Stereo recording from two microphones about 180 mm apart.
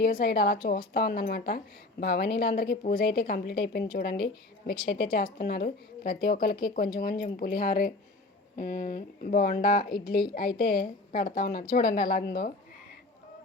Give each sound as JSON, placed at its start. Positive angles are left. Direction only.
{"t": 0.2, "sound": "a woman's voice", "side_deg": 60}
{"t": 9.9, "sound": "a woman's voice", "side_deg": 25}
{"t": 10.3, "sound": "a woman's voice", "side_deg": 55}